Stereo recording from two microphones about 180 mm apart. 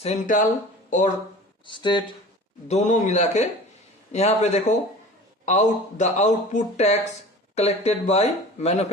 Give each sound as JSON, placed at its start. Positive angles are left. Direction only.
{"t": 0.0, "sound": "speech", "side_deg": 40}
{"t": 1.6, "sound": "speech", "side_deg": 25}
{"t": 2.6, "sound": "speech", "side_deg": 40}